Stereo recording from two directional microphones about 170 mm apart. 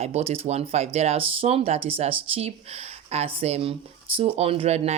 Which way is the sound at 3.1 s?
35° right (ahead or behind).